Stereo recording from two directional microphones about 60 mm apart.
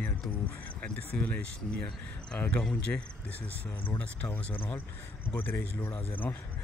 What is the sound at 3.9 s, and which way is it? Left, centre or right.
Speech, left.